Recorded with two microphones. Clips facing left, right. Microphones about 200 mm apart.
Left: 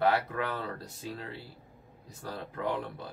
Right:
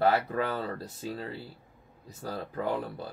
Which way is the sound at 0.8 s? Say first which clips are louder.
Right 4 dB; centre (ahead or behind).